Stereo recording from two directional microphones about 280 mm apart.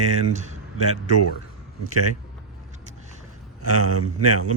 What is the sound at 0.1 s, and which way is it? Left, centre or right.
Speech, right.